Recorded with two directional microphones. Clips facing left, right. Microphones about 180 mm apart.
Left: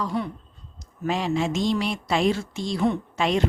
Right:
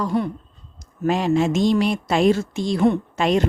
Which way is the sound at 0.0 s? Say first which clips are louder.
Right 5 dB; 50° right (ahead or behind).